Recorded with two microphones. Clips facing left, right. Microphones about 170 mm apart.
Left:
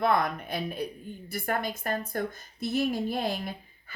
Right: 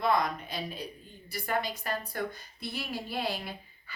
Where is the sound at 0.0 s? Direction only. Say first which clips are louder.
Left 2 dB; 55° left (ahead or behind).